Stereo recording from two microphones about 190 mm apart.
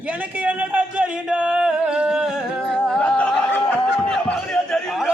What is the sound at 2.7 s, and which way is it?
Music, 5° left (ahead or behind).